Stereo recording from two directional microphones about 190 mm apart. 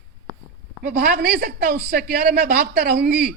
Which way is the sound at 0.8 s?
55° right (ahead or behind).